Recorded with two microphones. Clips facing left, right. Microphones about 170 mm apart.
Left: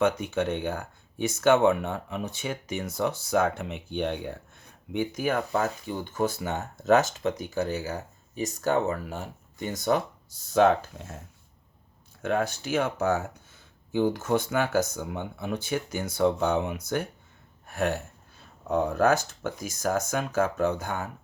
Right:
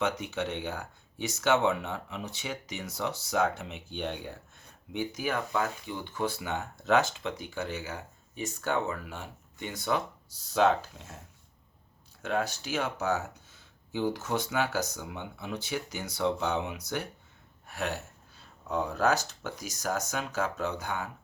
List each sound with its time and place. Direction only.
0.0 s speech: 50° left (ahead or behind)
12.2 s speech: 50° left (ahead or behind)